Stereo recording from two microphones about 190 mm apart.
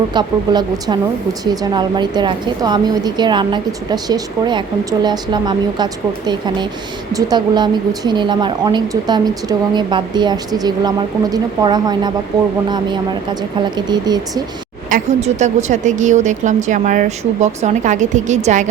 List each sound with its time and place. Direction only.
0.1 s a woman's voice: 20° right (ahead or behind)
14.8 s speech: 40° right (ahead or behind)